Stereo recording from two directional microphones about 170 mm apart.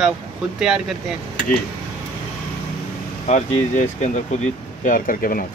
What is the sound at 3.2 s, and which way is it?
Speech, 40° left (ahead or behind).